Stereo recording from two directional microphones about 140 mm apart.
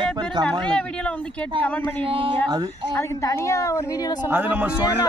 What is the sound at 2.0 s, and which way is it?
Speech, 40° right (ahead or behind).